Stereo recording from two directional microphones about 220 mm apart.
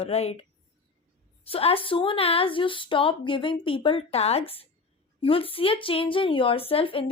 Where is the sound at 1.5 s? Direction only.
25° left (ahead or behind).